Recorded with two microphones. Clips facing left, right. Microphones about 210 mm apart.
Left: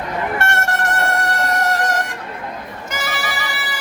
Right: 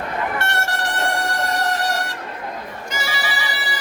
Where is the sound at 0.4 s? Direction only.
50° left (ahead or behind).